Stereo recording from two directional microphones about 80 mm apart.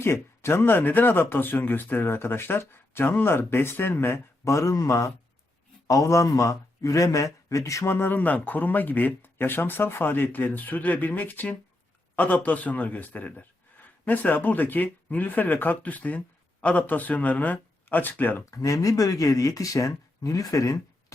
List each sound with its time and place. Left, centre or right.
0.0 s a man's voice: left
18.5 s speech: left